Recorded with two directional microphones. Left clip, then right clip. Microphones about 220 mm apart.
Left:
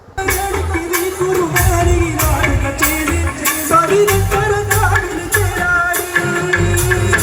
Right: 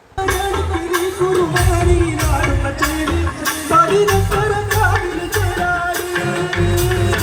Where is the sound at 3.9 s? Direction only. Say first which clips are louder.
Left 2 dB; 35° left (ahead or behind).